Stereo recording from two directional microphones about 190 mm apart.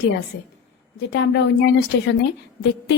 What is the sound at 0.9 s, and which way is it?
A woman's voice, 70° left (ahead or behind).